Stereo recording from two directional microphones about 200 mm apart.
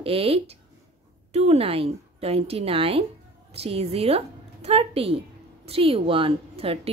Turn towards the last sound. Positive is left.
turn(degrees=-30)  # may be behind; listen again after turning